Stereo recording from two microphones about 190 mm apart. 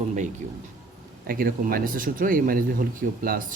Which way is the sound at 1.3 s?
50° right (ahead or behind).